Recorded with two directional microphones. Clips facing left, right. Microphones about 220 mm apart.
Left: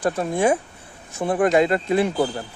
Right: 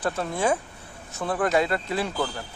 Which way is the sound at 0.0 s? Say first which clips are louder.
Left 5 dB; 15° left (ahead or behind).